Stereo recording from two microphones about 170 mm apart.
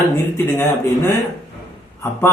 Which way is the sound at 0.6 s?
10° left (ahead or behind).